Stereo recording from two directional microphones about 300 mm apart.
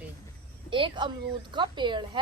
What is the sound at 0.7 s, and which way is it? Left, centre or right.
Speech, centre.